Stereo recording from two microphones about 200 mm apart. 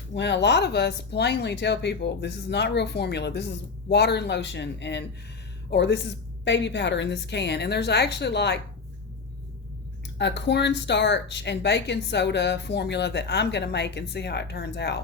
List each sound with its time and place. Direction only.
0.2 s speech: 60° left (ahead or behind)
10.2 s speech: 60° left (ahead or behind)